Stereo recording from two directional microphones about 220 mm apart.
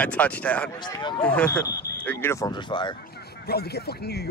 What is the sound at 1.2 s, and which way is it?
Speech, 5° left (ahead or behind).